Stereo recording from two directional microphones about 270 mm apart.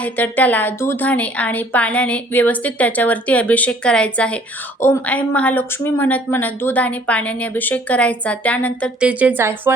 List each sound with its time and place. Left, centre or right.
0.0 s speech: centre